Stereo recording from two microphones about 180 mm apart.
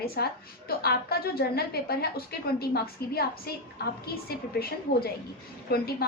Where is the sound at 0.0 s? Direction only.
60° left (ahead or behind).